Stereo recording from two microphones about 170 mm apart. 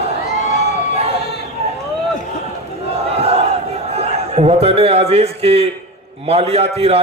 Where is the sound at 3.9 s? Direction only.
35° right (ahead or behind).